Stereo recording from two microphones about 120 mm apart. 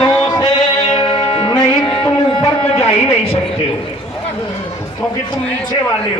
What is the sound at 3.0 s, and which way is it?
Music, 20° left (ahead or behind).